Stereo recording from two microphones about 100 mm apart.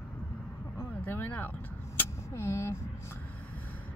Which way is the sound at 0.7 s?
20° left (ahead or behind).